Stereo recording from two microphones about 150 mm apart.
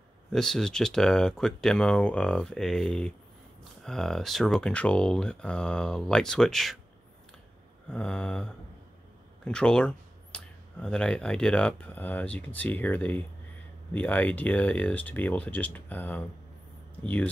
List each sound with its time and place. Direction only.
0.3 s speech: 5° left (ahead or behind)
7.9 s speech: 5° left (ahead or behind)